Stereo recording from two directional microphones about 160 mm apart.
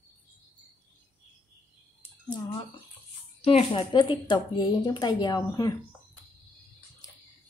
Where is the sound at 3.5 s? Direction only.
35° left (ahead or behind).